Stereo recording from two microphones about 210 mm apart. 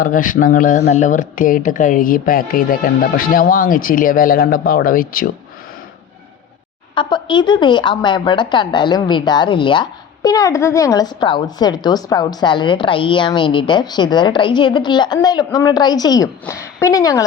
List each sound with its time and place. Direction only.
0.0 s speech: 40° left (ahead or behind)
6.9 s a woman's voice: 20° left (ahead or behind)